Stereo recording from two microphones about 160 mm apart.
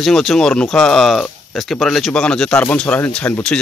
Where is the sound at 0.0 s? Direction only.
Centre (ahead or behind).